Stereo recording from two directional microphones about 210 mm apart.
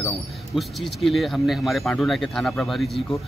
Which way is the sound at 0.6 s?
Centre (ahead or behind).